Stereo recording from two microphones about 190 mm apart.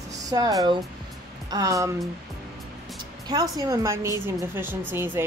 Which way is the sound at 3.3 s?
20° right (ahead or behind).